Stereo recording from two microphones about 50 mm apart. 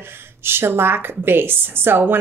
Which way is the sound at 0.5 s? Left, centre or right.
Right.